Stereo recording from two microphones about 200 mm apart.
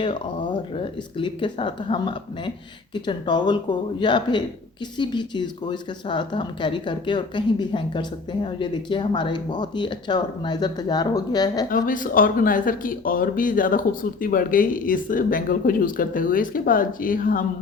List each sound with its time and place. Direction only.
0.0 s speech: 25° left (ahead or behind)
11.7 s speech: 40° left (ahead or behind)